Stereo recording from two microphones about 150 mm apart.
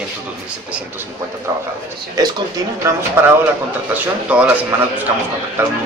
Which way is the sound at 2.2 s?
25° right (ahead or behind).